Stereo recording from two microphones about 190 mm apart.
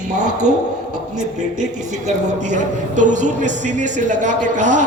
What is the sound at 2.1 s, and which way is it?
Speech, 40° right (ahead or behind).